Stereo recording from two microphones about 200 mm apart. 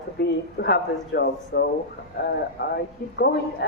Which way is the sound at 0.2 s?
55° left (ahead or behind).